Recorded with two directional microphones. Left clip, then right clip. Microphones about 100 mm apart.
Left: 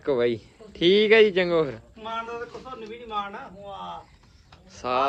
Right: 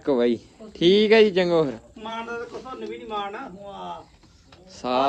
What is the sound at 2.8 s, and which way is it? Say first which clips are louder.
Speech: right 1 dB; 15° right (ahead or behind).